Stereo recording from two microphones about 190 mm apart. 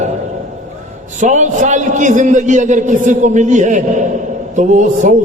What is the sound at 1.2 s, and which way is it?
A man's voice, 40° right (ahead or behind).